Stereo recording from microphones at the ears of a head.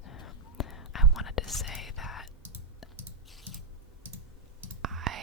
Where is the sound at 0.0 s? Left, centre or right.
Left.